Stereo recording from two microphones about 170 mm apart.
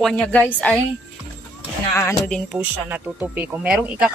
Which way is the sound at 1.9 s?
15° left (ahead or behind).